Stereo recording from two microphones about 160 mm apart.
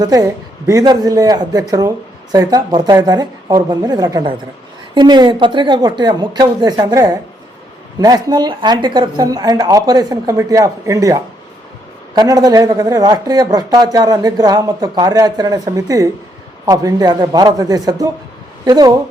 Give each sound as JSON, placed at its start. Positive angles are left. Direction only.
{"t": 0.0, "sound": "speech", "side_deg": -20}